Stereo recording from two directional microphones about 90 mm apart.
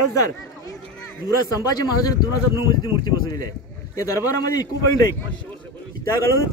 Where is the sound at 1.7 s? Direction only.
45° left (ahead or behind).